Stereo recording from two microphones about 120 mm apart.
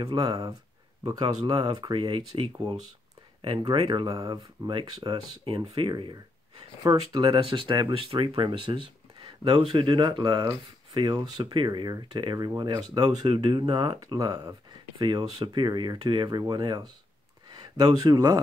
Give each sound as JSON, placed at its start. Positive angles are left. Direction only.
{"t": 0.0, "sound": "speech", "side_deg": -35}
{"t": 3.7, "sound": "speech", "side_deg": -40}
{"t": 7.2, "sound": "speech", "side_deg": -50}